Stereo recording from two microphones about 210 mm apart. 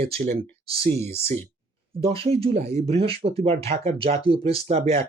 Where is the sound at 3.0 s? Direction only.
25° right (ahead or behind).